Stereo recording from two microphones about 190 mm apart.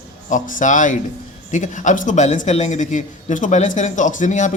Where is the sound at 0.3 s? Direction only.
45° left (ahead or behind).